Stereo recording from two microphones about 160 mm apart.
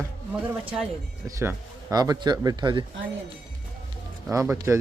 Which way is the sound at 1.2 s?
20° right (ahead or behind).